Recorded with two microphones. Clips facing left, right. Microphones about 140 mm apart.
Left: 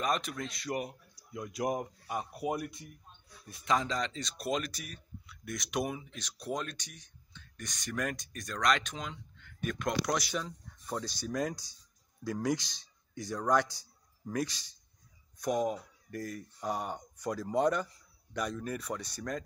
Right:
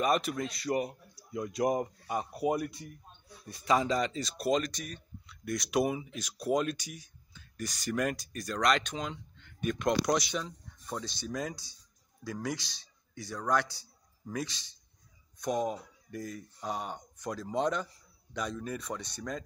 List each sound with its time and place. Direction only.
0.0 s speech: 5° right (ahead or behind)
9.4 s a sound: 20° right (ahead or behind)
10.3 s a man's voice: 5° left (ahead or behind)